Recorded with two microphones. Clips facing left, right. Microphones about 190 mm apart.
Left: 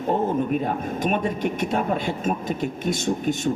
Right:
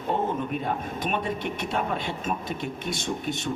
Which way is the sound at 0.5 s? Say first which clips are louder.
Left 5 dB; 45° left (ahead or behind).